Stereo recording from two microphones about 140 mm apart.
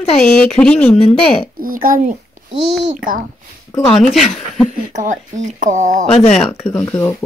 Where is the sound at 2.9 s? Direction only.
75° right (ahead or behind).